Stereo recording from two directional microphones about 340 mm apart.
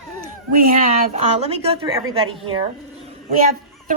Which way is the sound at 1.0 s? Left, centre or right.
Centre.